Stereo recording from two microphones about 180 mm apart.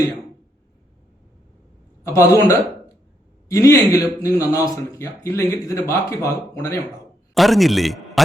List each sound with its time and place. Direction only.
2.0 s speech: 15° left (ahead or behind)
7.3 s a man's voice: centre (ahead or behind)